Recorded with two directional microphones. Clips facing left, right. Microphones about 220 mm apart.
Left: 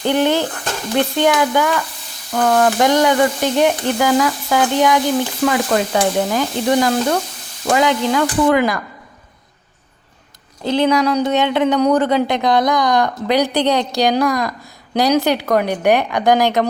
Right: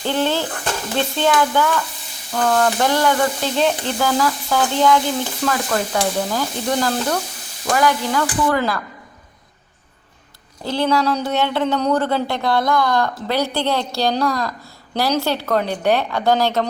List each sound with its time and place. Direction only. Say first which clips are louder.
0.0 s speech: left 4 dB; 15° left (ahead or behind)
10.6 s speech: left 4 dB; 20° left (ahead or behind)